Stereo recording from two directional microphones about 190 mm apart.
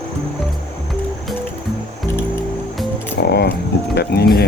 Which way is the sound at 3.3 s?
60° left (ahead or behind).